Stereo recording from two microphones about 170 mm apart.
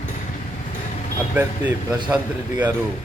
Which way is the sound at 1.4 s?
15° right (ahead or behind).